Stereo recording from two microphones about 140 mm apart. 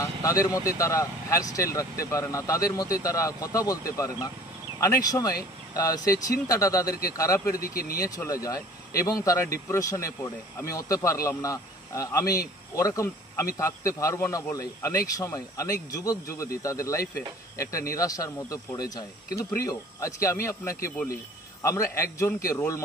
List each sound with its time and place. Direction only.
0.2 s speech: 25° left (ahead or behind)
7.6 s speech: 90° left
8.0 s speech: 25° left (ahead or behind)